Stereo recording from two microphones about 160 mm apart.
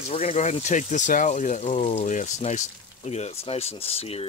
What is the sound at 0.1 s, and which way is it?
Speech, 40° left (ahead or behind).